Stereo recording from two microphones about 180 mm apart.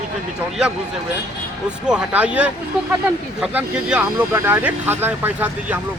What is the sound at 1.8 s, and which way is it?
Speech, 5° right (ahead or behind).